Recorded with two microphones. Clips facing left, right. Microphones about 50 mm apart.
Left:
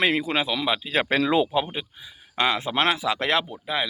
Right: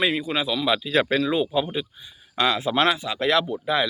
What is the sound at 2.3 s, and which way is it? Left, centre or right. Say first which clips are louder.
Speech: right 2 dB; left.